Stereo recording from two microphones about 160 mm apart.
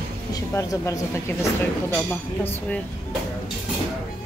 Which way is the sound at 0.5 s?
15° left (ahead or behind).